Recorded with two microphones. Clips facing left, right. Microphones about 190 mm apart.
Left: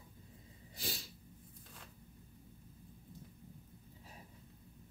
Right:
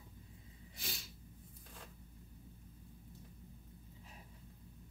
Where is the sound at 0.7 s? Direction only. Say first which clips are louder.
Left 5 dB; 35° left (ahead or behind).